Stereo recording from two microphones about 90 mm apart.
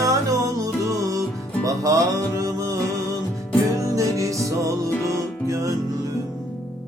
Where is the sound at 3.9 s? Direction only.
40° right (ahead or behind).